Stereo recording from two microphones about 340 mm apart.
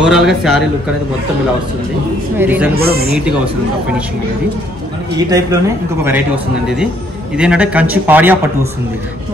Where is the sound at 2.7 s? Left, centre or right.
Right.